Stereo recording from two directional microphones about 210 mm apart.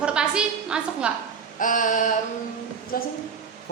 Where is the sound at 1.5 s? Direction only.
40° left (ahead or behind).